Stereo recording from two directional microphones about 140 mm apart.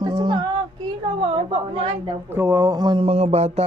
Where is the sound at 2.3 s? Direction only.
15° right (ahead or behind).